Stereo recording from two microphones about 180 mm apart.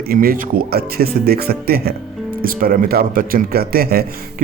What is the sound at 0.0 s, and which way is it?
Speech, 55° right (ahead or behind).